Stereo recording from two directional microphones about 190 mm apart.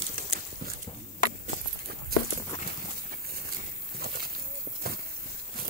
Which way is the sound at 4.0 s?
50° right (ahead or behind).